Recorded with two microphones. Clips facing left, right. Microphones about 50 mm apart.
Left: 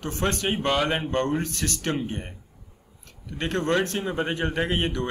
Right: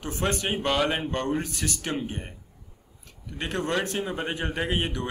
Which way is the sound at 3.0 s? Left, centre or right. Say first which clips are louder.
Left 3 dB; centre.